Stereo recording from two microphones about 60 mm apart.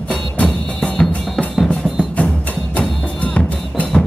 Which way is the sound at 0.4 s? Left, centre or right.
Centre.